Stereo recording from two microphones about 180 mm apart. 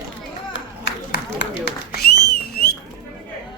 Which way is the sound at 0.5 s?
70° left (ahead or behind).